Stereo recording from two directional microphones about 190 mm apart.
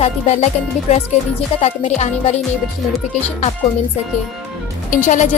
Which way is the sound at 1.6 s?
40° left (ahead or behind).